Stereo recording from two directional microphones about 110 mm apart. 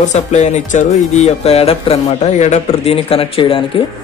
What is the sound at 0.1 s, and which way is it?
Speech, 90° left.